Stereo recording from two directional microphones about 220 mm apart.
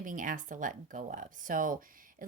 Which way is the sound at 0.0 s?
35° right (ahead or behind).